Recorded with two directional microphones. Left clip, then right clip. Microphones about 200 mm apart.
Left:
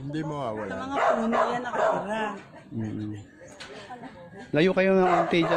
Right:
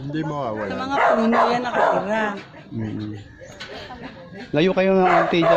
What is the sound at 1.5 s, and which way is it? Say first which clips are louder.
Speech: right 6 dB; centre (ahead or behind).